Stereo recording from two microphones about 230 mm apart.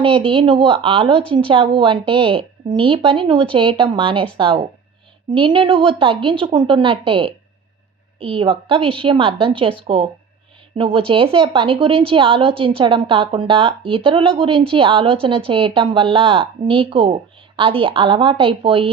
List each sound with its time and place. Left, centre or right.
0.0 s a woman's voice: right